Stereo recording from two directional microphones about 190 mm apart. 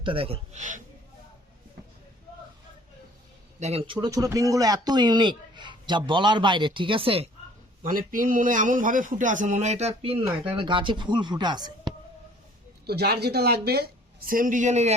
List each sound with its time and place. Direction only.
0.0 s speech: 30° right (ahead or behind)
3.6 s speech: 30° right (ahead or behind)
7.8 s a man's voice: 45° right (ahead or behind); by 11.9 s 20° right (ahead or behind)
12.8 s a woman's voice: 55° right (ahead or behind); by 14.9 s 35° right (ahead or behind)